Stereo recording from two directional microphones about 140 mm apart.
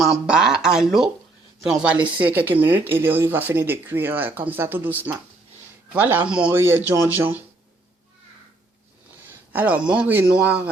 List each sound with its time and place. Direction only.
0.0 s speech: 5° right (ahead or behind)
9.5 s speech: 10° right (ahead or behind)